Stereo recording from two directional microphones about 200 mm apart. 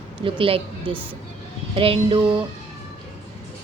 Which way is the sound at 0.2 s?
25° right (ahead or behind).